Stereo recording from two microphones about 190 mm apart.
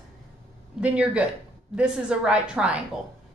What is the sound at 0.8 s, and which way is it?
A woman's voice, 5° right (ahead or behind).